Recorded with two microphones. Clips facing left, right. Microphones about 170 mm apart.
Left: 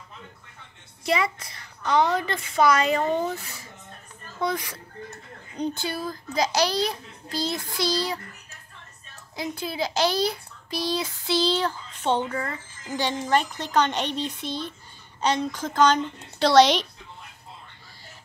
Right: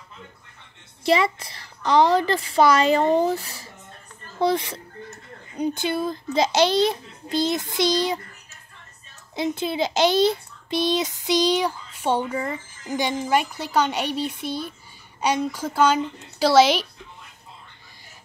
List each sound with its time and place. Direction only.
1.0 s a woman's voice: 30° right (ahead or behind)
9.3 s a child's voice: 25° right (ahead or behind); by 16.8 s 5° right (ahead or behind)